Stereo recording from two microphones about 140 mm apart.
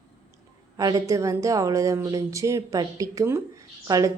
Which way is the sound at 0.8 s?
25° right (ahead or behind).